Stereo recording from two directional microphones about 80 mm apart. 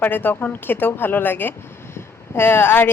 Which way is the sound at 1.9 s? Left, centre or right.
Left.